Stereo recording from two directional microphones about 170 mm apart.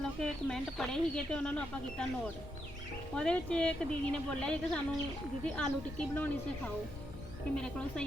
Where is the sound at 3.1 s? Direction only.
5° left (ahead or behind).